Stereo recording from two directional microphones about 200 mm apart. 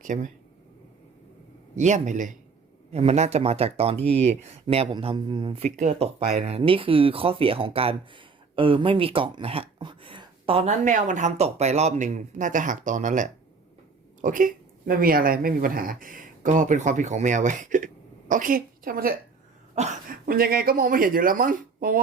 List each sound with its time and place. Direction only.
0.0 s speech: 40° right (ahead or behind)
1.7 s speech: 35° right (ahead or behind)
19.7 s speech: 35° right (ahead or behind)